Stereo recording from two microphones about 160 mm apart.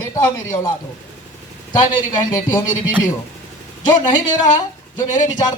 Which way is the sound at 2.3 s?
25° left (ahead or behind).